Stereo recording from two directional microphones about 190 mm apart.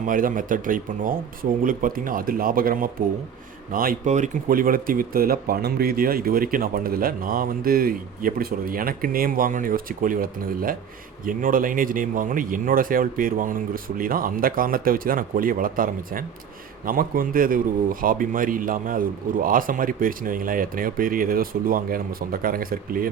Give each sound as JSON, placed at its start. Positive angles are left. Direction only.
{"t": 0.0, "sound": "speech", "side_deg": -45}